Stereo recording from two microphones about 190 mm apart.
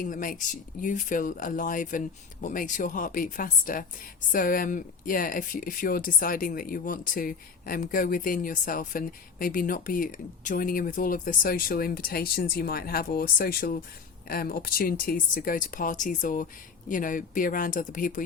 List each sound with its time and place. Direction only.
0.0 s speech: 45° left (ahead or behind)